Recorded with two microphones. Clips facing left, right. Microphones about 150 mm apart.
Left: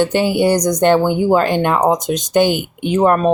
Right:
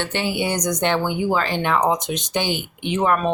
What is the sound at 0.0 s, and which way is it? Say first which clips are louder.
Speech: left 9 dB; 45° left (ahead or behind).